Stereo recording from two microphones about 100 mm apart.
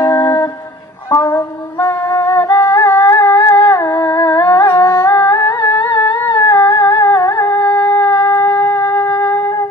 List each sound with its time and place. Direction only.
0.1 s humming: 30° left (ahead or behind)
8.7 s wind instrument: 35° left (ahead or behind)